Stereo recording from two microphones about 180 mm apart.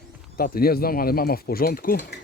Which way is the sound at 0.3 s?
55° left (ahead or behind).